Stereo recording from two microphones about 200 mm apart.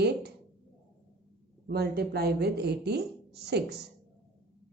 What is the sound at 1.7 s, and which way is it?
Speech, 55° right (ahead or behind).